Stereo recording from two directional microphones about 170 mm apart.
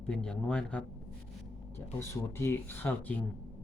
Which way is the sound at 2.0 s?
15° left (ahead or behind).